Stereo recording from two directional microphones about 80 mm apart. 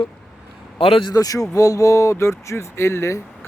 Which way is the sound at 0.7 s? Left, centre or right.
Left.